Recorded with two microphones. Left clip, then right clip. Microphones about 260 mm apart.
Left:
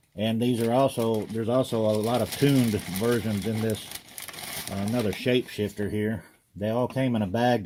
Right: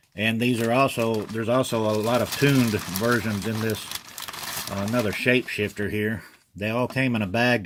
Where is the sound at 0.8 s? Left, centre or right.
Right.